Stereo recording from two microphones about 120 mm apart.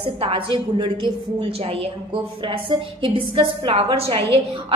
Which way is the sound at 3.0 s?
45° right (ahead or behind).